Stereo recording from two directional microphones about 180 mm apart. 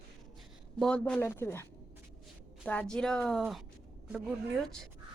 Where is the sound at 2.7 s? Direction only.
5° left (ahead or behind).